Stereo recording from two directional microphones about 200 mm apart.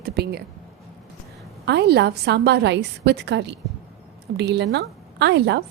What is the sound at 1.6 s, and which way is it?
A woman's voice, 55° right (ahead or behind).